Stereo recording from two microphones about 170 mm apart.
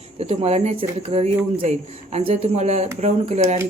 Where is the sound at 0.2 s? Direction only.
40° right (ahead or behind).